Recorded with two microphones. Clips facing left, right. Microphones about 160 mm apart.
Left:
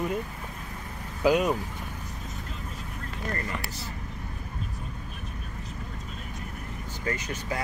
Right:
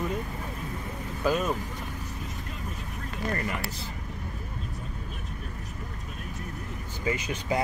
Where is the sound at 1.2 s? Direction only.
15° left (ahead or behind).